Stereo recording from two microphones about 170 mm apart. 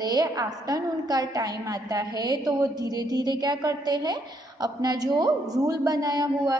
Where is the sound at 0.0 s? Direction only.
25° right (ahead or behind).